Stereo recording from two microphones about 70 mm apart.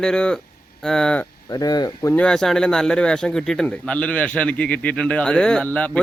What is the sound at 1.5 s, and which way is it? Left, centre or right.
Speech, left.